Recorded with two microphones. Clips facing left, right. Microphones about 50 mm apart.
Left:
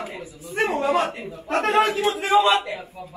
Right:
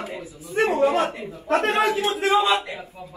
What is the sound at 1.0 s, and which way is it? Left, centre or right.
Speech, centre.